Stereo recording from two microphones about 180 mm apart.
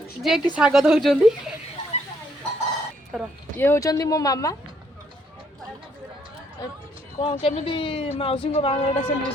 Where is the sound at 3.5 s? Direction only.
15° left (ahead or behind).